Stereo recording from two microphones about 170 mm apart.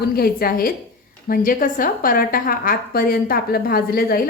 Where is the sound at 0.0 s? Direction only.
65° left (ahead or behind).